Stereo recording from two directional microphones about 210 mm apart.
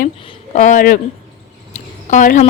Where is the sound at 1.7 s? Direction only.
35° left (ahead or behind).